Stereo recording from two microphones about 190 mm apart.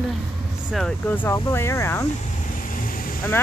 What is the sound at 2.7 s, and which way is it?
Vehicle, 45° left (ahead or behind).